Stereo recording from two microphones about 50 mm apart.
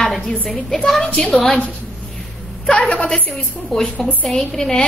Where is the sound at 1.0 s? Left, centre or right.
Left.